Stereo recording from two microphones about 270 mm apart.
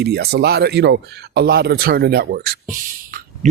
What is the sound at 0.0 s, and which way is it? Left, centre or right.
Speech, right.